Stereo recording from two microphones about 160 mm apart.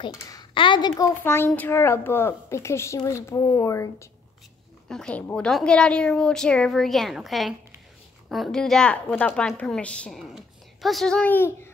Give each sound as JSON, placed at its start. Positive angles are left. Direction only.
{"t": 0.0, "sound": "a child's voice", "side_deg": 25}
{"t": 4.8, "sound": "a woman's voice", "side_deg": 5}